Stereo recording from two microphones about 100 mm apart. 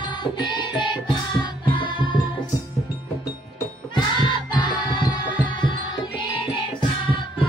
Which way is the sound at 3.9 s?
50° left (ahead or behind).